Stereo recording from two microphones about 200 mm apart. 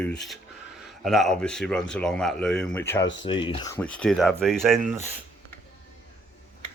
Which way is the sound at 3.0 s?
65° left (ahead or behind).